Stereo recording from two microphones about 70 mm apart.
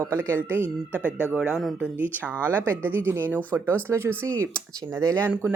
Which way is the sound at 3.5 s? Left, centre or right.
Right.